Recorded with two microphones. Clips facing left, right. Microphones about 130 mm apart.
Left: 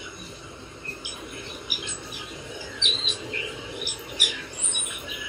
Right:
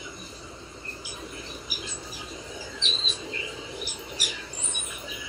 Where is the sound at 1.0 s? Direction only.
35° right (ahead or behind).